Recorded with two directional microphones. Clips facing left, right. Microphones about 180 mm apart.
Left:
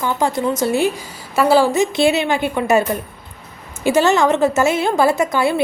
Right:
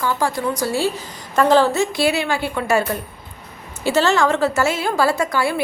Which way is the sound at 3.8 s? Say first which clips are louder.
Left 3 dB; 15° left (ahead or behind).